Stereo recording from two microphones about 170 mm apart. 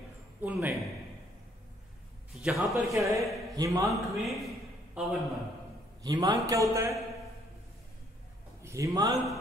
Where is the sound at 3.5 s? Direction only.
20° right (ahead or behind).